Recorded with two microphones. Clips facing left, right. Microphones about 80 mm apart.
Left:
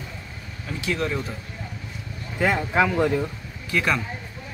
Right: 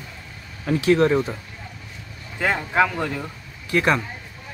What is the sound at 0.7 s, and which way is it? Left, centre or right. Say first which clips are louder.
Speech: right 9 dB; right.